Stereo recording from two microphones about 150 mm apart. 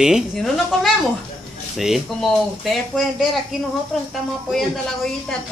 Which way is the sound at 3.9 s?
Centre (ahead or behind).